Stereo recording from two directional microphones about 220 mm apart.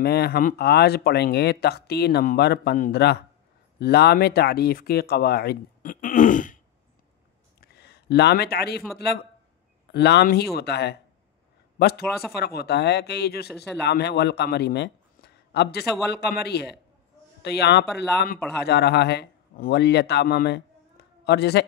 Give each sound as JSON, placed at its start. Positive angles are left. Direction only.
{"t": 0.0, "sound": "speech", "side_deg": 45}
{"t": 7.6, "sound": "speech", "side_deg": 45}
{"t": 12.4, "sound": "a man's voice", "side_deg": 45}